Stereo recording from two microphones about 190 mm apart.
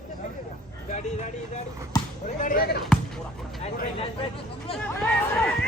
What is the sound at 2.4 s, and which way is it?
Speech, 50° left (ahead or behind).